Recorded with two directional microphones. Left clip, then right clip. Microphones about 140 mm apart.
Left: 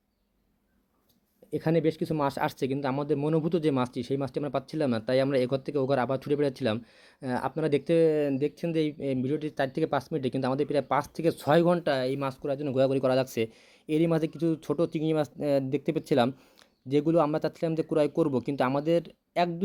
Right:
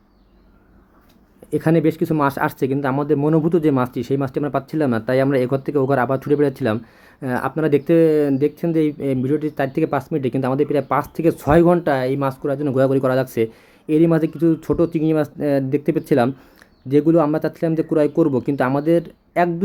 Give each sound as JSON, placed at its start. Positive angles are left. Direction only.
{"t": 1.5, "sound": "speech", "side_deg": 25}